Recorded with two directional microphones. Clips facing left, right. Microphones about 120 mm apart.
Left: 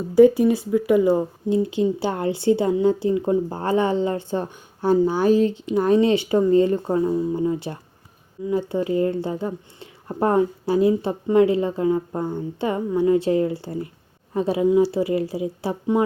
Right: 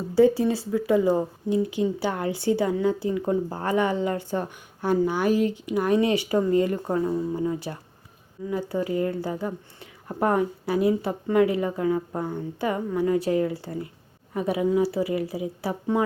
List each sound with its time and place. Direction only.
0.1 s speech: 15° left (ahead or behind)
1.5 s speech: 30° left (ahead or behind)